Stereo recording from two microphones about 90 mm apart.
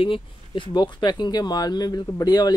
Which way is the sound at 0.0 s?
70° left (ahead or behind).